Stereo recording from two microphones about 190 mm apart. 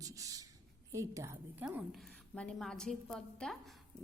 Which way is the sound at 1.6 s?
Centre (ahead or behind).